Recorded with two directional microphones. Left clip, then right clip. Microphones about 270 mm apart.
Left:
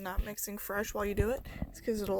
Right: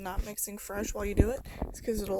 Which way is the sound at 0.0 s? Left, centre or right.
Centre.